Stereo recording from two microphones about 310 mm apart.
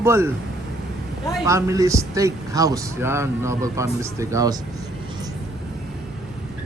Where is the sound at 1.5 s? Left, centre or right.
Centre.